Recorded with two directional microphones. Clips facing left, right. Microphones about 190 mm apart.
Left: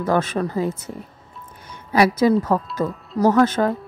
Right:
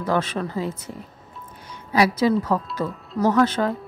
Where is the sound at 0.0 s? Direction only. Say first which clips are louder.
Left 3 dB; 45° left (ahead or behind).